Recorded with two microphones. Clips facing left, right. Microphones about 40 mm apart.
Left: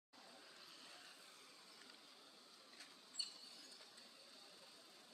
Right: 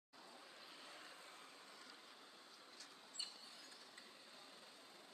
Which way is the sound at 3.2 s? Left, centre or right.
Right.